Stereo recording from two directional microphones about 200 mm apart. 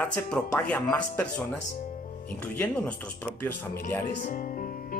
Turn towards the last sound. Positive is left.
turn(degrees=40)  # may be behind; listen again after turning